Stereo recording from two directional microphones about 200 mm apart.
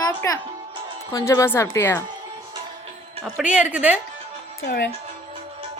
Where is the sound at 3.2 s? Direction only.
5° right (ahead or behind).